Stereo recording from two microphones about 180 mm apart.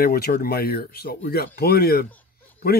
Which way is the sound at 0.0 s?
55° left (ahead or behind).